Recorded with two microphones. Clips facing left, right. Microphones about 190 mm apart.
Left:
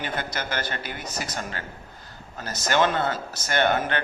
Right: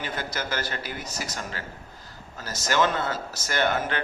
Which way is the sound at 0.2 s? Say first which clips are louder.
Left 1 dB; 60° left (ahead or behind).